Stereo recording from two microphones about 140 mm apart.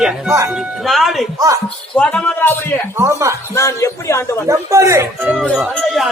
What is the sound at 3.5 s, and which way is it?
Speech, 20° left (ahead or behind).